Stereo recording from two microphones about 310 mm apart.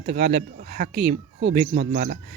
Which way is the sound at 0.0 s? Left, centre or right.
Right.